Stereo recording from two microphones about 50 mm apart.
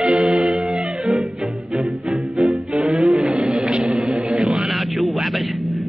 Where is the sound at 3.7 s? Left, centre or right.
Centre.